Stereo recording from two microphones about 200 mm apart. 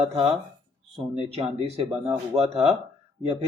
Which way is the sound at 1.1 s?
30° right (ahead or behind).